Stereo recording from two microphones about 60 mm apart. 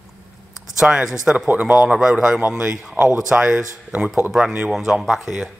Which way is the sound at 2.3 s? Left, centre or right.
Right.